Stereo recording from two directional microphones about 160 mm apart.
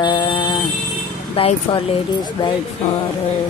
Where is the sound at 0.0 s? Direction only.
30° left (ahead or behind).